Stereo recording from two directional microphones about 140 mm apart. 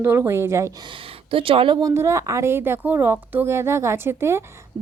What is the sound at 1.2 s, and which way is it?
Speech, 40° right (ahead or behind).